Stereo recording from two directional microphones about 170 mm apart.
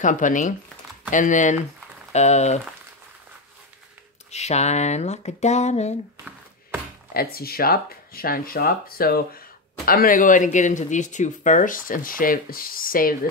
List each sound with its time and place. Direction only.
0.0 s speech: 50° left (ahead or behind)
4.3 s speech: 40° left (ahead or behind)
7.2 s speech: 60° left (ahead or behind)